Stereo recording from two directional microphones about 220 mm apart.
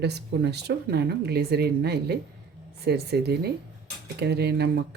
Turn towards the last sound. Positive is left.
turn(degrees=-45)  # may be behind; listen again after turning